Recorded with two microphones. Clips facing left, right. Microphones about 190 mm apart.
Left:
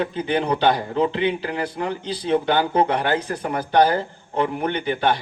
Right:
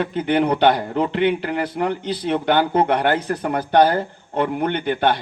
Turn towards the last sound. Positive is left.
turn(degrees=-60)  # may be behind; listen again after turning